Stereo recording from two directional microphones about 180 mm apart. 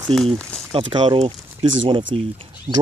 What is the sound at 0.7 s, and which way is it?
Speech, 30° right (ahead or behind).